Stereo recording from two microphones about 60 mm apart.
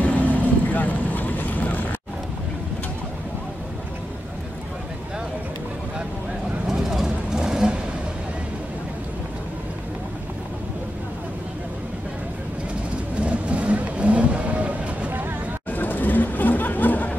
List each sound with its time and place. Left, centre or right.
0.0 s vehicle: left
6.7 s vehicle: centre
13.2 s vehicle: right
15.7 s chatter: left